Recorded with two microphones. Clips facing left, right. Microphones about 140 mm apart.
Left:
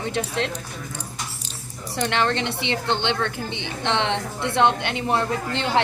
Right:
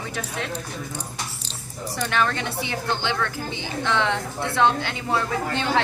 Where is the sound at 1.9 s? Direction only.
25° left (ahead or behind).